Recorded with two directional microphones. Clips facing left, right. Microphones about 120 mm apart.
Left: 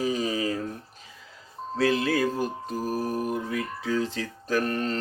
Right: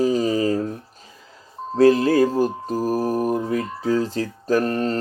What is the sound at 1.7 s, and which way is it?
Mantra, 40° right (ahead or behind).